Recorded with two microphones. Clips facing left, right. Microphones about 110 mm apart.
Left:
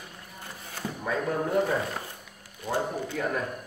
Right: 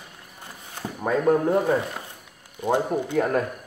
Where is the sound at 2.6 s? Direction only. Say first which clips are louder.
Right 7 dB; 20° right (ahead or behind).